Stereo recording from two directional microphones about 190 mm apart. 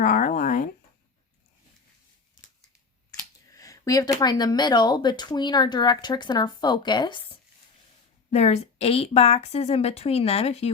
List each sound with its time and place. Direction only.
0.0 s speech: 45° left (ahead or behind)
3.5 s speech: 20° left (ahead or behind)
8.3 s a woman's voice: 35° left (ahead or behind)